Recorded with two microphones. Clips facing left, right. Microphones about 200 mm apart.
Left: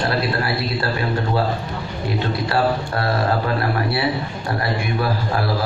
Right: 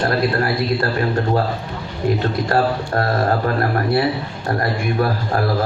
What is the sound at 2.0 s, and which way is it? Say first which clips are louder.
A man's voice: right 4 dB; 45° right (ahead or behind).